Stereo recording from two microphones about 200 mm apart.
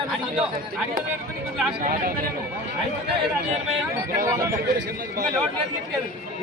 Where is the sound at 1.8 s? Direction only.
45° right (ahead or behind).